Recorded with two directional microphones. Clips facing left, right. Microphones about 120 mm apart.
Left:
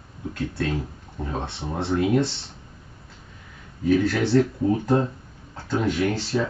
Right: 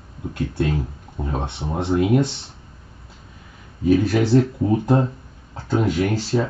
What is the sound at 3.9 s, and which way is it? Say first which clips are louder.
Speech: right 3 dB; 15° right (ahead or behind).